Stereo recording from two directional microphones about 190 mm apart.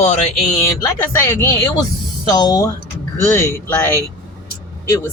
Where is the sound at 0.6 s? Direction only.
15° left (ahead or behind).